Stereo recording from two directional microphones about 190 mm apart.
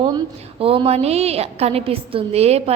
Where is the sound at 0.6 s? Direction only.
30° right (ahead or behind).